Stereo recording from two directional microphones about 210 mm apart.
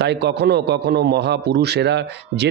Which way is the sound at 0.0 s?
55° right (ahead or behind).